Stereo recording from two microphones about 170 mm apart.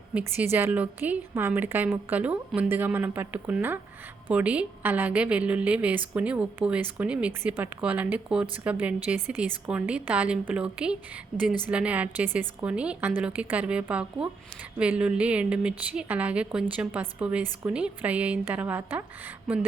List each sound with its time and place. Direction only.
0.1 s a woman's voice: 10° right (ahead or behind)